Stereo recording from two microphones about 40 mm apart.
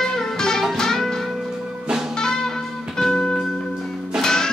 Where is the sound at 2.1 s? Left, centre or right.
Centre.